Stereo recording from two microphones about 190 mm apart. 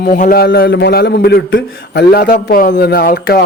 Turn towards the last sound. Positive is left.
turn(degrees=55)  # may be behind; listen again after turning